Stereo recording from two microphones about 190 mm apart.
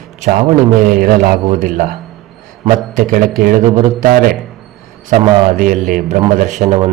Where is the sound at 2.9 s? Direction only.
45° right (ahead or behind).